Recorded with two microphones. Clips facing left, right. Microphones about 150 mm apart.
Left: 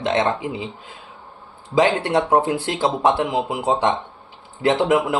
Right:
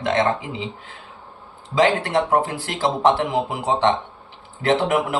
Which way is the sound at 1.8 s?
20° left (ahead or behind).